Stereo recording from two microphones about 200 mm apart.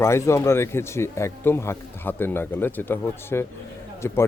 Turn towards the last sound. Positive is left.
turn(degrees=15)  # may be behind; listen again after turning